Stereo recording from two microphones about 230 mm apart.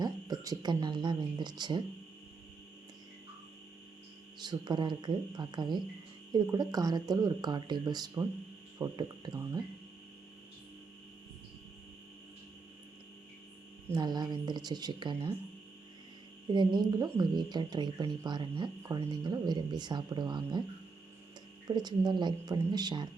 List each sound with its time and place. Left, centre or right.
0.0 s cricket: centre
4.4 s cricket: centre
6.3 s speech: centre
13.9 s speech: centre
16.5 s cricket: centre
21.7 s cricket: centre